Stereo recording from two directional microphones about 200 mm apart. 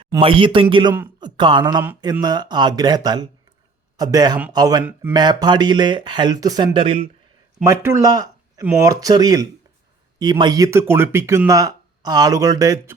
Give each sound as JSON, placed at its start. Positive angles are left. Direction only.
{"t": 0.1, "sound": "speech", "side_deg": -25}
{"t": 7.6, "sound": "a man's voice", "side_deg": -15}